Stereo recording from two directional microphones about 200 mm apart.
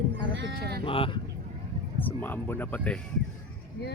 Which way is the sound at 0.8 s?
25° left (ahead or behind).